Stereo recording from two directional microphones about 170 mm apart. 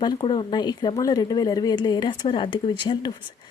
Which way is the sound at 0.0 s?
30° left (ahead or behind).